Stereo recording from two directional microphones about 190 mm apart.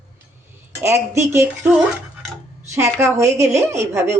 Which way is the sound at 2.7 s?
15° right (ahead or behind).